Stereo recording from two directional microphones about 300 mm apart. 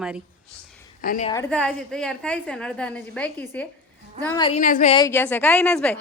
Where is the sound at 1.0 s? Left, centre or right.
Left.